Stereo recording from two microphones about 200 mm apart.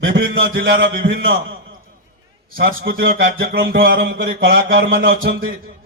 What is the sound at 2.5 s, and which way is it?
Speech, 50° right (ahead or behind).